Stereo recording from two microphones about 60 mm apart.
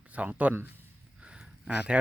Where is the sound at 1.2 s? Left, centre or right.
Centre.